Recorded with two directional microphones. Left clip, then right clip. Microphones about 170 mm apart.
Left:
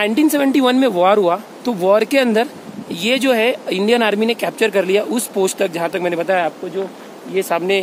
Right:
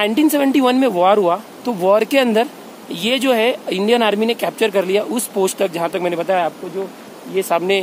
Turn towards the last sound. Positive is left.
turn(degrees=-20)  # may be behind; listen again after turning